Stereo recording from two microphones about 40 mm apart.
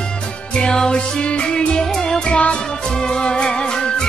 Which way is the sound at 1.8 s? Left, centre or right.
Centre.